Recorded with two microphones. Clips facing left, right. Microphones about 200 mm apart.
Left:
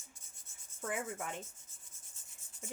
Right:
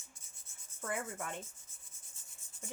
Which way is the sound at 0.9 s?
10° left (ahead or behind).